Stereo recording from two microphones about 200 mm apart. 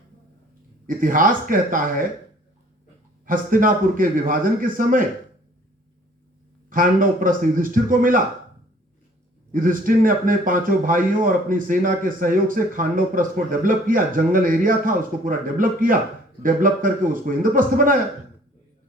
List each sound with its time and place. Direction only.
0.9 s speech: 45° right (ahead or behind)
3.2 s speech: 45° right (ahead or behind)
6.7 s speech: 45° right (ahead or behind)
9.5 s speech: 45° right (ahead or behind)